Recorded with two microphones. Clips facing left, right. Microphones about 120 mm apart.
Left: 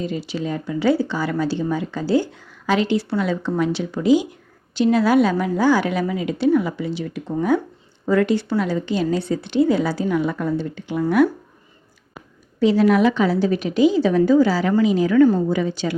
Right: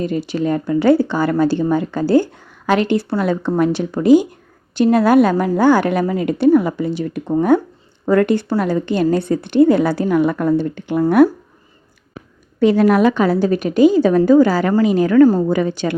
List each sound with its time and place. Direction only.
0.0 s speech: 55° right (ahead or behind)
12.5 s speech: 55° right (ahead or behind)
15.4 s a woman's voice: 55° right (ahead or behind)